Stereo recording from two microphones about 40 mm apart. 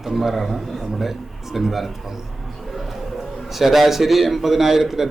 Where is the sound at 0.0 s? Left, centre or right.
Centre.